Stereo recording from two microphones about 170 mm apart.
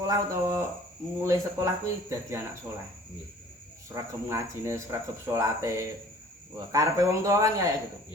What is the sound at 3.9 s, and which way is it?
A man's voice, 15° right (ahead or behind).